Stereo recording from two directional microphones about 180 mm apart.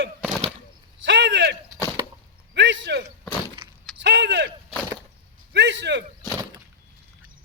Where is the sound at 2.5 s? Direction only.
80° right.